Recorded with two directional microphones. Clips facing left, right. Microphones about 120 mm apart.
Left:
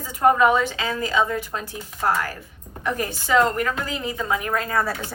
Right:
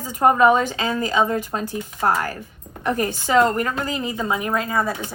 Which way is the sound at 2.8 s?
45° right (ahead or behind).